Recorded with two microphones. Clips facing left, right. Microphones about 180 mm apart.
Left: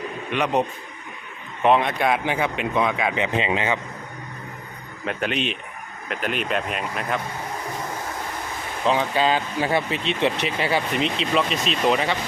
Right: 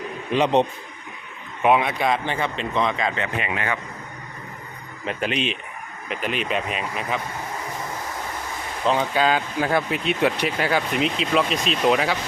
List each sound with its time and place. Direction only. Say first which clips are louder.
0.3 s a man's voice: right 4 dB; 30° right (ahead or behind)
1.6 s speech: even; 5° right (ahead or behind); by 3.2 s 10° left (ahead or behind)
3.3 s a man's voice: left 4 dB; 25° left (ahead or behind)
5.0 s speech: even; centre (ahead or behind)
8.8 s speech: even; centre (ahead or behind)